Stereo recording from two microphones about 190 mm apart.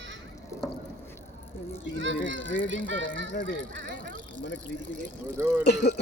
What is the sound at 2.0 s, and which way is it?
Speech, 75° right (ahead or behind).